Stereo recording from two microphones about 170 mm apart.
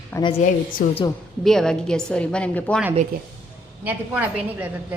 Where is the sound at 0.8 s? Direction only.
55° left (ahead or behind).